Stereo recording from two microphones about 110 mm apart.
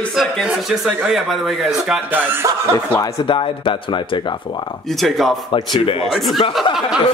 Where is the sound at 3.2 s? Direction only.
50° left (ahead or behind).